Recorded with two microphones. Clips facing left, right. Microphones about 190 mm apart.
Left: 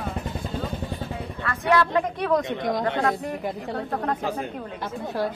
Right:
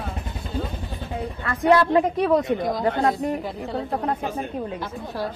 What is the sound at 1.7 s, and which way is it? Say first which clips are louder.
Speech: right 4 dB; 30° right (ahead or behind).